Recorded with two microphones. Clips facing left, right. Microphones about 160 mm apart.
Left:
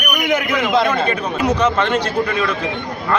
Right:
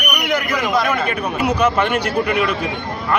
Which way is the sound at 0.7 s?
25° left (ahead or behind).